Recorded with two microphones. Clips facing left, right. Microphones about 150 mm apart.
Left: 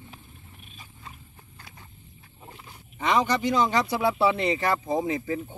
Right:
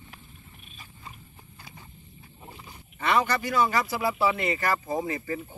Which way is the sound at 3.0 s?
15° left (ahead or behind).